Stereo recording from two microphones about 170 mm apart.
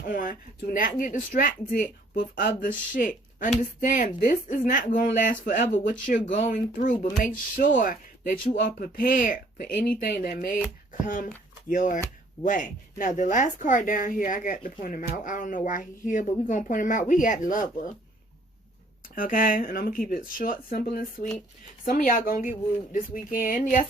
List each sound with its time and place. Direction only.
0.1 s speech: 50° left (ahead or behind)
8.5 s speech: 60° left (ahead or behind)
19.1 s speech: 55° left (ahead or behind)